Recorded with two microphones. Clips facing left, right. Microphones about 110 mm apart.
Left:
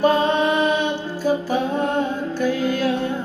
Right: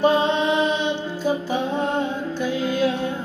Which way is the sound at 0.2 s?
50° left (ahead or behind).